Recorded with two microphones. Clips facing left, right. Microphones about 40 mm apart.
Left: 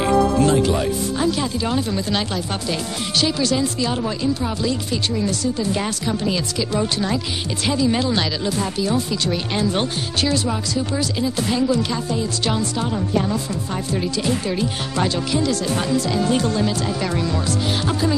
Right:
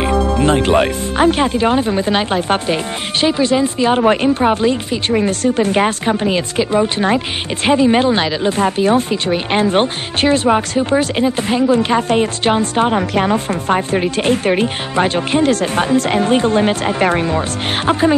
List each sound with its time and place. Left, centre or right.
0.0 s music: right
0.6 s speech: right
3.9 s speech: right